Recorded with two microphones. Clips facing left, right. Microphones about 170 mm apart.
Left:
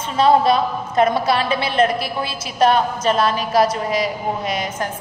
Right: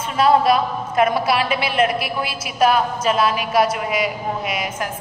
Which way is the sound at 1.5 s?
5° right (ahead or behind).